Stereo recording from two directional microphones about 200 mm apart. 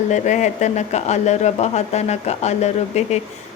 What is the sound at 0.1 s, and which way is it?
Speech, 35° left (ahead or behind).